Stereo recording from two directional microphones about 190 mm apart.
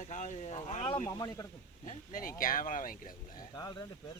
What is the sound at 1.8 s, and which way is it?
Speech, 40° left (ahead or behind).